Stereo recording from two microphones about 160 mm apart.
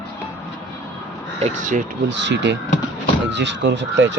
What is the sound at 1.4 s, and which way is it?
Speech, 55° right (ahead or behind).